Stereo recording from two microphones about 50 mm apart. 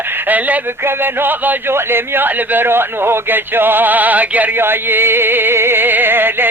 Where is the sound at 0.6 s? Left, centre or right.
Right.